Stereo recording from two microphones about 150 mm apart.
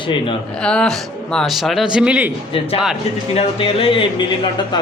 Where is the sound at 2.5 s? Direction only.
35° left (ahead or behind).